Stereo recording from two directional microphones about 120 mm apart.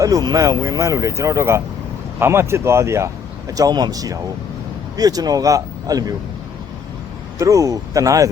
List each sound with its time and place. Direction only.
0.0 s speech: 30° right (ahead or behind)
7.3 s speech: 25° right (ahead or behind)